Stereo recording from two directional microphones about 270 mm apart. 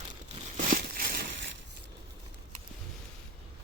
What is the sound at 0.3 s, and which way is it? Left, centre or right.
Crumpling, right.